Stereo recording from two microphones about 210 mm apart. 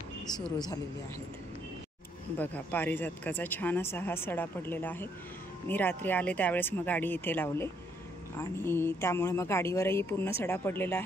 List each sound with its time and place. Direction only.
0.3 s speech: 20° left (ahead or behind)
2.3 s speech: 10° left (ahead or behind)